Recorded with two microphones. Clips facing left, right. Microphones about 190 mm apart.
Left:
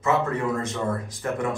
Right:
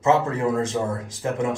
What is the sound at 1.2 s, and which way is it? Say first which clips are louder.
Speech: right 2 dB; 20° right (ahead or behind).